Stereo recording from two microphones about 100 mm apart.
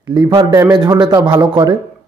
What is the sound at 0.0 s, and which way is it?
Speech, 45° right (ahead or behind).